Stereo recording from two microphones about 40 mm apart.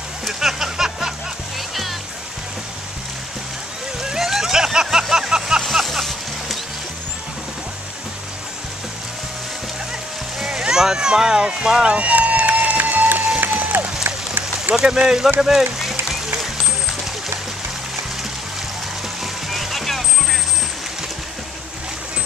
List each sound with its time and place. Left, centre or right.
0.3 s a sound: centre
4.0 s a sound: centre
5.7 s music: centre
10.4 s speech: centre
11.9 s run: right
13.4 s music: right
14.0 s a sound: right
15.0 s speech: centre
15.8 s applause: centre
19.5 s vehicle: centre